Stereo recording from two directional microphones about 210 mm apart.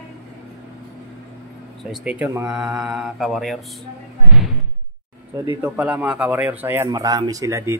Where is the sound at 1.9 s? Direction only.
5° right (ahead or behind).